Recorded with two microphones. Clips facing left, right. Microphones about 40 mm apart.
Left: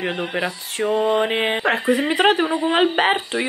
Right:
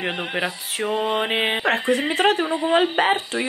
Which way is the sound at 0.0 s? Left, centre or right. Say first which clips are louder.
Left 1 dB; centre.